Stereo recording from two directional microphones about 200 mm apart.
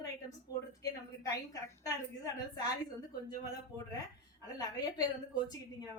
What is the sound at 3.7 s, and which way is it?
Speech, 15° right (ahead or behind).